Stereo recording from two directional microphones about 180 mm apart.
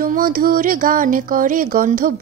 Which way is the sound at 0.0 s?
55° right (ahead or behind).